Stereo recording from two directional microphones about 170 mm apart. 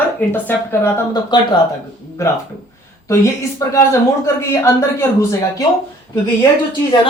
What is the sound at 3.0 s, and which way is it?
A man's voice, 15° left (ahead or behind).